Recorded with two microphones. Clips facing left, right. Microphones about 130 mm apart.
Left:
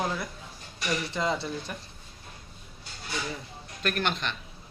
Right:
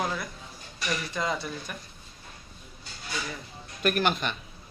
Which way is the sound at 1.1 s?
25° left (ahead or behind).